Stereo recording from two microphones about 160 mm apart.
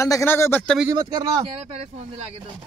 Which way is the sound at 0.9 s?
25° right (ahead or behind).